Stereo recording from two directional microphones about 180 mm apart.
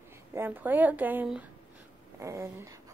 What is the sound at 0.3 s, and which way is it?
Speech, 10° right (ahead or behind).